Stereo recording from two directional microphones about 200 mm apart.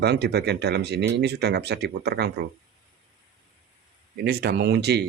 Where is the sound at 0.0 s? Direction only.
55° right (ahead or behind).